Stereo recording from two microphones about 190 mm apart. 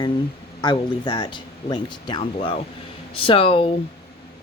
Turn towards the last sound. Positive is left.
turn(degrees=30)  # may be behind; listen again after turning